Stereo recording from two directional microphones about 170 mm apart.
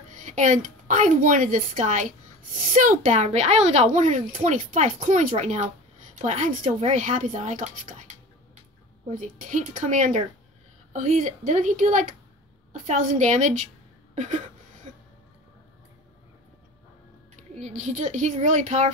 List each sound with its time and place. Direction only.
0.1 s a woman's voice: 45° right (ahead or behind)
9.1 s a child's voice: 50° right (ahead or behind)
14.1 s a sound: 45° right (ahead or behind)
17.6 s a child's voice: 40° right (ahead or behind)